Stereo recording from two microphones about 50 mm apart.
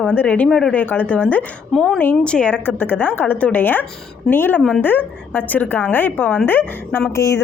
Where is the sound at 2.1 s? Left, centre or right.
Left.